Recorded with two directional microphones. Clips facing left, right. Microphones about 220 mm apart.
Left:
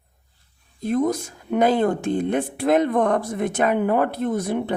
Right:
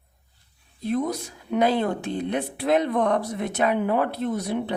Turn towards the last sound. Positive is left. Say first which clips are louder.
# left 3 dB
turn(degrees=50)  # may be behind; listen again after turning